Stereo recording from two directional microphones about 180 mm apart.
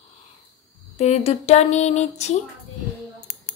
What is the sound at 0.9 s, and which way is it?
Speech, 35° left (ahead or behind).